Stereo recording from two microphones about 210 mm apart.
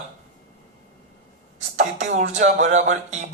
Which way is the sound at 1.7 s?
35° right (ahead or behind).